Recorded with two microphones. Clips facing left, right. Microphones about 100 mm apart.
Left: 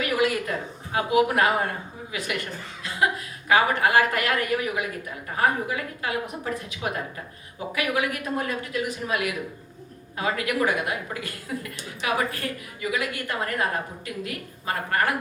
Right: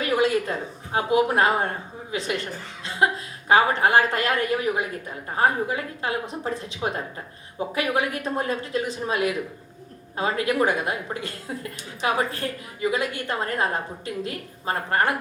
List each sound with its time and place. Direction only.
0.0 s a woman's voice: 30° right (ahead or behind)